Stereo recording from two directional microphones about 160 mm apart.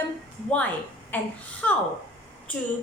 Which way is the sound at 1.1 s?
10° left (ahead or behind).